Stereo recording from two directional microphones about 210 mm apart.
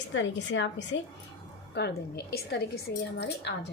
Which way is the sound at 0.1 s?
60° left (ahead or behind).